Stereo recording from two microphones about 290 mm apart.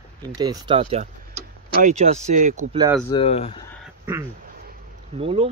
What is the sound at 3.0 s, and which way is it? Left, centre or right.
Speech, centre.